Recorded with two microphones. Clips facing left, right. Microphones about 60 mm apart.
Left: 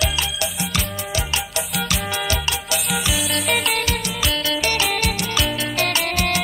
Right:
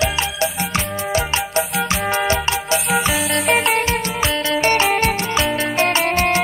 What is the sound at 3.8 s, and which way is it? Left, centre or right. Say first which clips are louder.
Music: right 4 dB; right.